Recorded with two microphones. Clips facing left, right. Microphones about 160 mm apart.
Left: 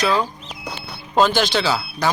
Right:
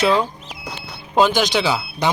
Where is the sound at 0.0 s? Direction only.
25° right (ahead or behind).